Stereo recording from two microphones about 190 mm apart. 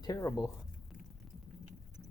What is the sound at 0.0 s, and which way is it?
Speech, 15° left (ahead or behind).